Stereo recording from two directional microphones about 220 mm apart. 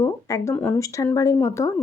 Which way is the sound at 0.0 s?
15° left (ahead or behind).